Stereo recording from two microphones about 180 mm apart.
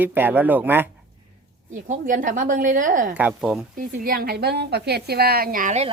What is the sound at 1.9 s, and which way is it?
A woman's voice, 45° right (ahead or behind).